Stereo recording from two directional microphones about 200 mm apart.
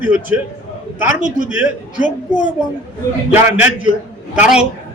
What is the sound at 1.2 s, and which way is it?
Speech, 40° right (ahead or behind).